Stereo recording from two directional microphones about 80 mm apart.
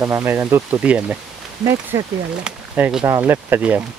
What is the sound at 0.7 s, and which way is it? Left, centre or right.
Speech, centre.